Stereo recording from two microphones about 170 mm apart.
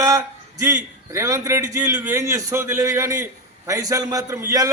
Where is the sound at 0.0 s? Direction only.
20° right (ahead or behind).